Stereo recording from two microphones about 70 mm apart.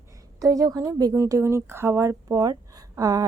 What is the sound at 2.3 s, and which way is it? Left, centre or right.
Speech, right.